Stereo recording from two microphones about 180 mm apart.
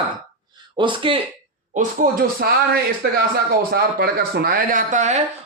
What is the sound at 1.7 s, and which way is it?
Speech, 50° right (ahead or behind).